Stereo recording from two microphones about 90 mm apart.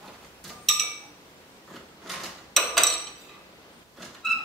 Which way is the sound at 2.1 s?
Centre (ahead or behind).